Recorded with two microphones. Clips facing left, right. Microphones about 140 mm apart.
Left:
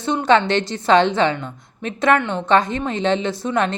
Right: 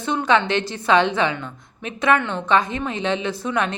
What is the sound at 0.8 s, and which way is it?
A woman's voice, 35° left (ahead or behind).